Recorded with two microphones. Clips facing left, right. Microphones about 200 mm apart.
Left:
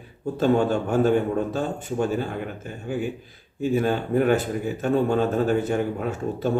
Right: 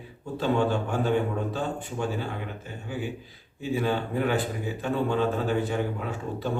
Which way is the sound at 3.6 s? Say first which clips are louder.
Left 4 dB; 45° left (ahead or behind).